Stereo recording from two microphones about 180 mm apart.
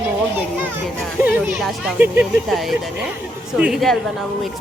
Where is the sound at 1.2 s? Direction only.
10° right (ahead or behind).